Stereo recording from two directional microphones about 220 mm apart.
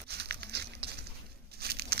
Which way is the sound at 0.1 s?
50° right (ahead or behind).